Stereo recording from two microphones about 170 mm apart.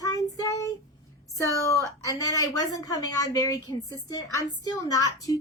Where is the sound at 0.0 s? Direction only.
20° left (ahead or behind).